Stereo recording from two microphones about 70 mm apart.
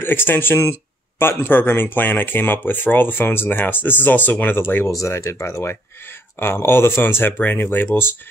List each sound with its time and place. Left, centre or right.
0.0 s speech: left
4.9 s speech: left